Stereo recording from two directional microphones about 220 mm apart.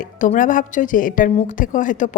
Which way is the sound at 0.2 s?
35° left (ahead or behind).